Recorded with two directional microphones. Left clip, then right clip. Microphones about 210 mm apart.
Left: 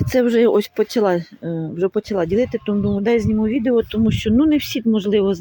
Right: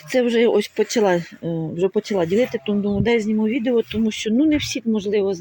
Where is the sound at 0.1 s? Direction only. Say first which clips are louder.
Left 2 dB; 15° left (ahead or behind).